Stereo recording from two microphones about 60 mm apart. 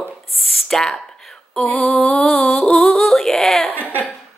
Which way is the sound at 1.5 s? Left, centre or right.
Centre.